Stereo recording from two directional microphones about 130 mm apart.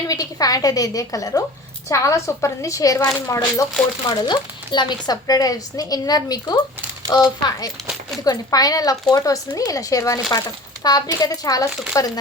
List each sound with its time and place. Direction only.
0.1 s a woman's voice: 30° left (ahead or behind)
3.0 s speech: 10° left (ahead or behind)
3.2 s a woman's voice: 25° left (ahead or behind)
4.1 s a woman's voice: 35° left (ahead or behind)